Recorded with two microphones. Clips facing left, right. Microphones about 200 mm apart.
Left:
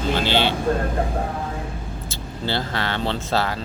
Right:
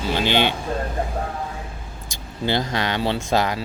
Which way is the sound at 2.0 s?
15° right (ahead or behind).